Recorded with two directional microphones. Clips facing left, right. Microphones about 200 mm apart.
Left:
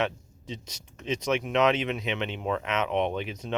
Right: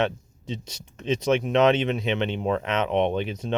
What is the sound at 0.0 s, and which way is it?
Speech, 30° right (ahead or behind).